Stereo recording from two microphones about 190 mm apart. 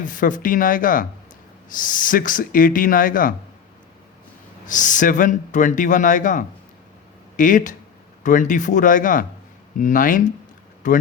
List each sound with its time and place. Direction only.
0.0 s speech: 45° left (ahead or behind)
4.6 s speech: 40° left (ahead or behind)